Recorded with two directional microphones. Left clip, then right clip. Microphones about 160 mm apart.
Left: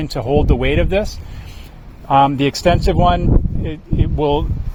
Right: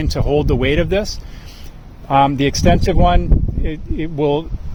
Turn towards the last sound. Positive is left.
turn(degrees=-40)  # may be behind; listen again after turning